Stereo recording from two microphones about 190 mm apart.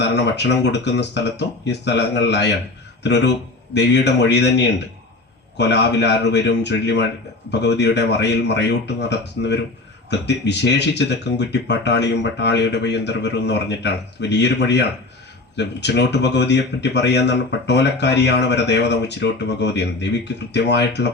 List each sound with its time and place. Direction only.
0.0 s a man's voice: 65° left (ahead or behind)